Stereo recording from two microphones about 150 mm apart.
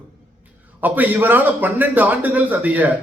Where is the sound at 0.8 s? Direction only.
10° right (ahead or behind).